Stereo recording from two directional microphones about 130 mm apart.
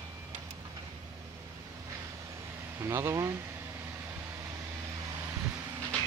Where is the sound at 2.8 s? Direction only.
20° right (ahead or behind).